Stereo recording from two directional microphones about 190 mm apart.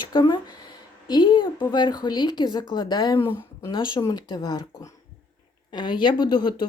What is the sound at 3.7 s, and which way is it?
Speech, 25° left (ahead or behind).